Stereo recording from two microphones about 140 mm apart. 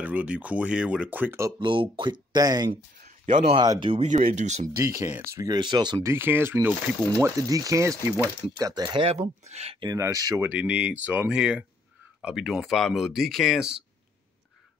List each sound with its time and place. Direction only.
0.0 s speech: 10° right (ahead or behind)
1.6 s speech: 35° right (ahead or behind)
4.2 s speech: 50° right (ahead or behind)
4.7 s speech: 20° right (ahead or behind)
6.0 s speech: 15° right (ahead or behind)
7.2 s speech: 20° right (ahead or behind)
9.4 s speech: 50° right (ahead or behind)
9.8 s speech: 25° right (ahead or behind); by 13.7 s centre (ahead or behind)